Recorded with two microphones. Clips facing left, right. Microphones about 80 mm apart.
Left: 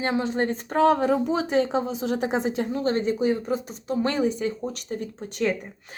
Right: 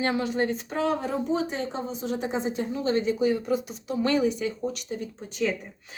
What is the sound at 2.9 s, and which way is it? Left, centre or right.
Speech, left.